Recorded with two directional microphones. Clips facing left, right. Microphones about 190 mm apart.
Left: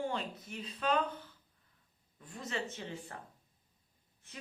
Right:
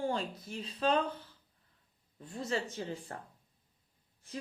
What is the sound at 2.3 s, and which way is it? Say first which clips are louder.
Speech: right 4 dB; 35° right (ahead or behind).